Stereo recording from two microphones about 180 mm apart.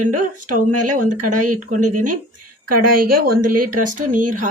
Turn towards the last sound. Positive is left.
turn(degrees=-45)  # may be behind; listen again after turning